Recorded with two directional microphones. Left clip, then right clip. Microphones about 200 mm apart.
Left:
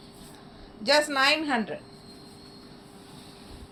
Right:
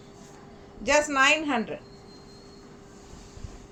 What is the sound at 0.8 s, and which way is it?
Speech, 30° right (ahead or behind).